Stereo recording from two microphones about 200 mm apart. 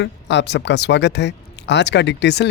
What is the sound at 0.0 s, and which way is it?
Speech, 60° left (ahead or behind).